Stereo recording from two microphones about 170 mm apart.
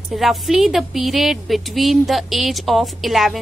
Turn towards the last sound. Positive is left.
turn(degrees=0)  # may be behind; listen again after turning